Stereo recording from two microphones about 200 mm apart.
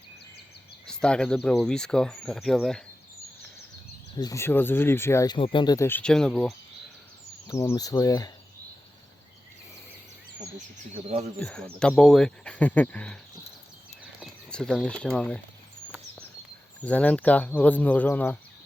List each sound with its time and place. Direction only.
0.9 s speech: 5° left (ahead or behind)
4.1 s speech: 20° left (ahead or behind); by 6.5 s 5° left (ahead or behind)
7.4 s speech: 15° left (ahead or behind)
11.3 s speech: 5° left (ahead or behind)
14.5 s speech: centre (ahead or behind)
16.8 s speech: 5° left (ahead or behind)